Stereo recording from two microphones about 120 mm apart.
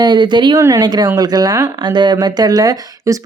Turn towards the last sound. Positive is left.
turn(degrees=-30)  # may be behind; listen again after turning